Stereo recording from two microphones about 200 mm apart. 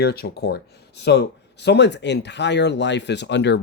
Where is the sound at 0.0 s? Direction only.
50° left (ahead or behind).